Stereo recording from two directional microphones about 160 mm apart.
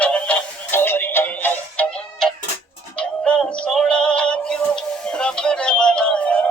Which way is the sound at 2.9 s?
5° left (ahead or behind).